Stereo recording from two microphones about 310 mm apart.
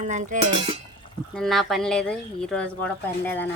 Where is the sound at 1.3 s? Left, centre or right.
Centre.